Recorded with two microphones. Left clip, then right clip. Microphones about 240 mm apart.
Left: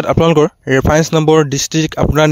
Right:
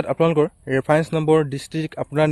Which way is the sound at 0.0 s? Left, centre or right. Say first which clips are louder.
Left 7 dB; left.